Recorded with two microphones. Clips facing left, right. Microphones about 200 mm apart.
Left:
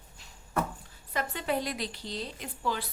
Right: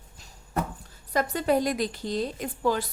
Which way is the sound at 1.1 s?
40° right (ahead or behind).